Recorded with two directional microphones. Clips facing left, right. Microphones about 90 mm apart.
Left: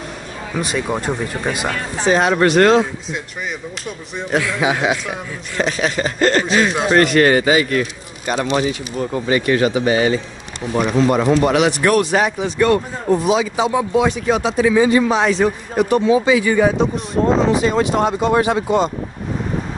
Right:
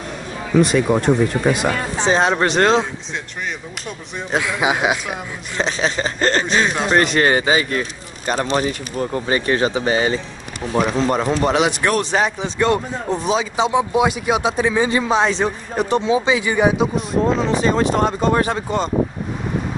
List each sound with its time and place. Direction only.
0.6 s speech: centre (ahead or behind)
2.0 s speech: 25° right (ahead or behind)
4.3 s speech: 20° right (ahead or behind)
6.7 s speech: centre (ahead or behind)
7.0 s speech: 25° right (ahead or behind)
8.3 s speech: 40° right (ahead or behind)
10.7 s speech: 5° left (ahead or behind)
11.4 s speech: 25° right (ahead or behind)
13.7 s speech: 15° right (ahead or behind)
14.6 s speech: 30° right (ahead or behind)
16.7 s speech: 5° right (ahead or behind)
17.6 s speech: 35° right (ahead or behind)